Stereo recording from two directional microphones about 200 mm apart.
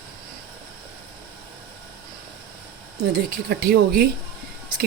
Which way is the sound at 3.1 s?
50° right (ahead or behind).